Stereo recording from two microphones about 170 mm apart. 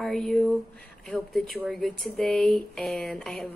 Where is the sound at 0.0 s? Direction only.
Centre (ahead or behind).